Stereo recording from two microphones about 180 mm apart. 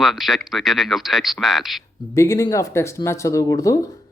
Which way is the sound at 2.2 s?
20° left (ahead or behind).